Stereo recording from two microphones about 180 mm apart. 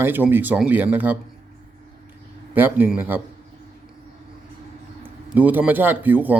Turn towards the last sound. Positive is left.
turn(degrees=-10)  # may be behind; listen again after turning